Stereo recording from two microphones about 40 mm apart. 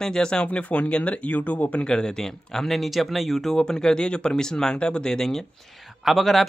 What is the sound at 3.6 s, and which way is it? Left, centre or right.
Speech, centre.